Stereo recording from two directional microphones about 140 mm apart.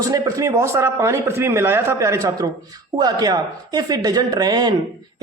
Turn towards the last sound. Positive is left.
turn(degrees=-30)  # may be behind; listen again after turning